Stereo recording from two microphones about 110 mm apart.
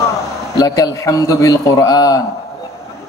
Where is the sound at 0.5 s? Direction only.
30° left (ahead or behind).